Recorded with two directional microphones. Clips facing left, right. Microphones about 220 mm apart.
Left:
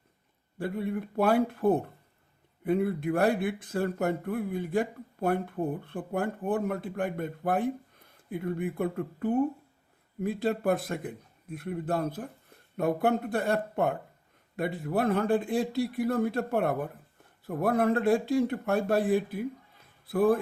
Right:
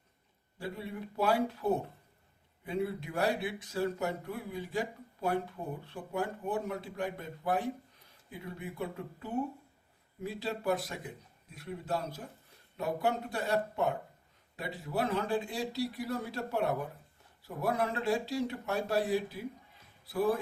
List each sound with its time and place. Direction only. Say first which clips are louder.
0.6 s a man's voice: left 8 dB; 55° left (ahead or behind)